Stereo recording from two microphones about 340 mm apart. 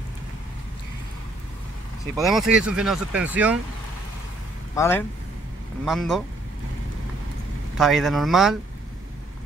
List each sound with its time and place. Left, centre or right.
2.1 s speech: centre
4.7 s speech: centre
7.7 s speech: centre